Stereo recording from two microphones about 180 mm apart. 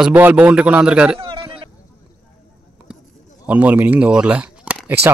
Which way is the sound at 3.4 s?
10° right (ahead or behind).